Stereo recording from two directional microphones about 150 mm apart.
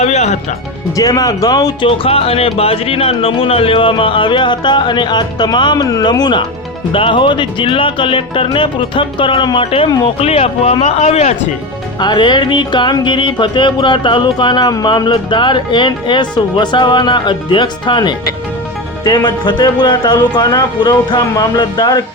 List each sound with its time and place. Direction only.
0.0 s music: 50° left (ahead or behind)
0.9 s speech: 25° left (ahead or behind)
1.9 s speech: 40° left (ahead or behind)
11.9 s speech: 30° left (ahead or behind)